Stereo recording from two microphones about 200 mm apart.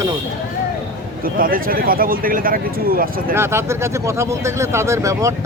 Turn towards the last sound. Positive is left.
turn(degrees=-15)  # may be behind; listen again after turning